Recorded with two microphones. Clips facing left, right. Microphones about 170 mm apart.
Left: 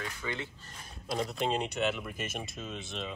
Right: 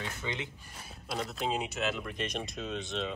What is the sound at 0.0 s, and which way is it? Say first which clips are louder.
Speech: even; 20° right (ahead or behind).